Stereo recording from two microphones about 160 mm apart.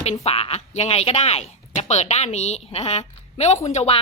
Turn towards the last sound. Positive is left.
turn(degrees=40)  # may be behind; listen again after turning